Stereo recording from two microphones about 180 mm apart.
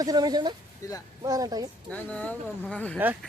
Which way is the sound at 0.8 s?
15° left (ahead or behind).